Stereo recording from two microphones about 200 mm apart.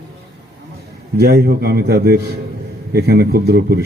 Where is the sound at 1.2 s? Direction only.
50° right (ahead or behind).